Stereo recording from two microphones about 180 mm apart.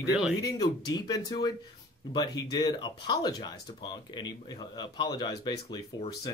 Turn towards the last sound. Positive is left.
turn(degrees=20)  # may be behind; listen again after turning